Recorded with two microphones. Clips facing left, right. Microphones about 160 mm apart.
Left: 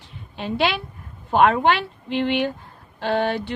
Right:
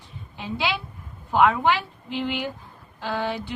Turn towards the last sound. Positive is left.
turn(degrees=70)  # may be behind; listen again after turning